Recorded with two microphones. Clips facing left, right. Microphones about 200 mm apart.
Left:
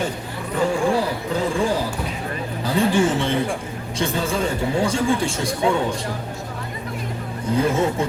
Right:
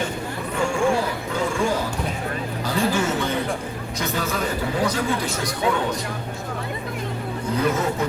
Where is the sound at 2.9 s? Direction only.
30° left (ahead or behind).